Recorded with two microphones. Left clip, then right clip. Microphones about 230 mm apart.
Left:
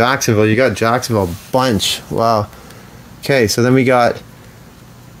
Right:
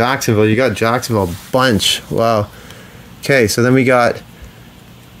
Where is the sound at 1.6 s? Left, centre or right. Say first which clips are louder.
Right 2 dB; centre.